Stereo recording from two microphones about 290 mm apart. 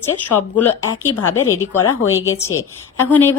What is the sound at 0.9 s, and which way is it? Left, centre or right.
Speech, left.